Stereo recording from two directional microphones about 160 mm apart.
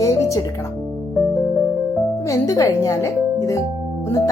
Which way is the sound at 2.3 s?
20° left (ahead or behind).